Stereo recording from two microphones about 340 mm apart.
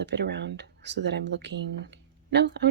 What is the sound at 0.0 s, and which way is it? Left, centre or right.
A woman's voice, right.